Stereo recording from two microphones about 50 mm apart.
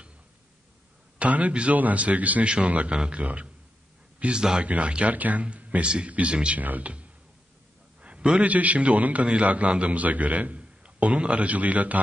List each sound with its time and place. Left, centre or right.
1.2 s a man's voice: right
6.6 s speech: right
8.0 s a man's voice: right